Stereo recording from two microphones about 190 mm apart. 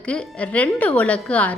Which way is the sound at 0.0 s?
5° left (ahead or behind).